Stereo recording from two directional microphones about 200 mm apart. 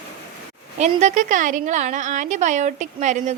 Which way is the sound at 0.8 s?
35° right (ahead or behind).